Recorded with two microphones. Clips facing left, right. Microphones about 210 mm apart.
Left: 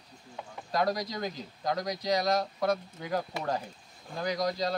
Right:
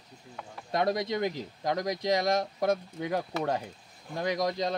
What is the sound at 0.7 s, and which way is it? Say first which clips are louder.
Speech: right 2 dB; 25° right (ahead or behind).